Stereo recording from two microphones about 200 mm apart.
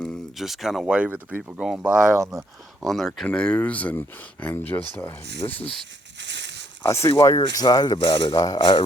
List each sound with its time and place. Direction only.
0.0 s speech: centre (ahead or behind)
2.3 s speech: 15° right (ahead or behind)
2.8 s speech: centre (ahead or behind); by 5.6 s 20° left (ahead or behind)
6.1 s a sound: 60° right (ahead or behind)
6.8 s speech: 15° left (ahead or behind)